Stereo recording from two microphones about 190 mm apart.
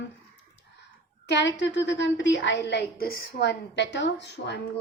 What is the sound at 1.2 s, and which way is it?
A woman's voice, 65° left (ahead or behind).